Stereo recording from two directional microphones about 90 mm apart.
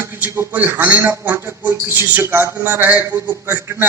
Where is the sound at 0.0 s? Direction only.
25° right (ahead or behind).